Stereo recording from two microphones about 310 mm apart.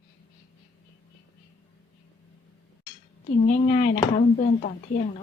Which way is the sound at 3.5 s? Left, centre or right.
Left.